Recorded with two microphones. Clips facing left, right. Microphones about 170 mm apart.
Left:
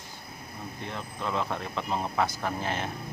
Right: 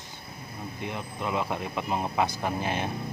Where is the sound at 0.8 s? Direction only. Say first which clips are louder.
Right 2 dB; 15° right (ahead or behind).